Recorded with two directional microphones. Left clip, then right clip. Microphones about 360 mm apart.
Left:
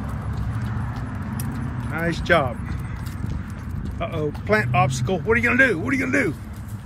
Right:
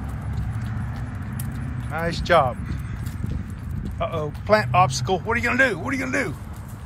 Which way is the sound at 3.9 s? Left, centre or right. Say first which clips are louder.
Even; centre.